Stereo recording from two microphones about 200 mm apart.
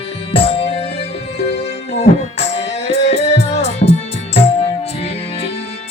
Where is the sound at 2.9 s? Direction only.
30° left (ahead or behind).